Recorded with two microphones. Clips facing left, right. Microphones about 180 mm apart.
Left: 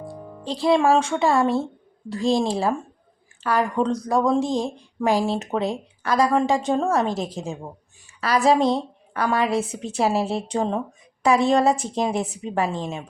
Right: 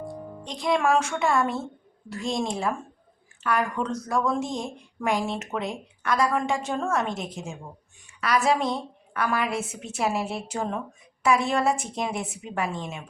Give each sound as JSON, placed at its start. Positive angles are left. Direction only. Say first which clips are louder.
{"t": 0.1, "sound": "a woman's voice", "louder": "left 5 dB", "side_deg": 30}